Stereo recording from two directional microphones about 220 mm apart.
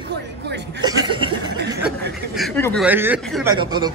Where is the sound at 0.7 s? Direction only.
20° right (ahead or behind).